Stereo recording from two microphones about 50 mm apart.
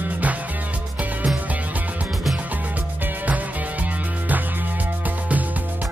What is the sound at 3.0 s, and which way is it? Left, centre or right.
Music, right.